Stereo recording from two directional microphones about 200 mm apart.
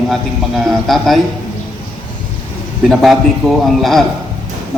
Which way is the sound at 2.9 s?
Centre (ahead or behind).